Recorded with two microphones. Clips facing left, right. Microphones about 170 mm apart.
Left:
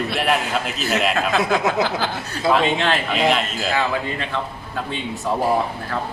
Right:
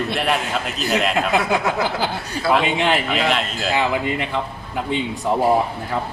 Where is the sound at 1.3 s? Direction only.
15° right (ahead or behind).